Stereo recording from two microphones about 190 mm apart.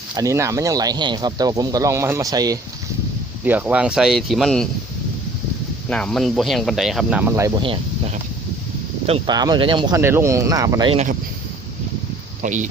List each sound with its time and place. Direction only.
0.1 s speech: 15° right (ahead or behind); by 4.7 s 5° left (ahead or behind)
5.9 s speech: 5° left (ahead or behind); by 10.0 s 25° right (ahead or behind)
10.0 s speech: 15° right (ahead or behind)
10.9 s speech: 40° right (ahead or behind)
12.4 s speech: 40° right (ahead or behind)